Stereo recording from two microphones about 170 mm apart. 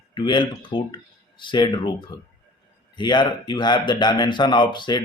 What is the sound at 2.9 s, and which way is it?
Speech, 25° left (ahead or behind).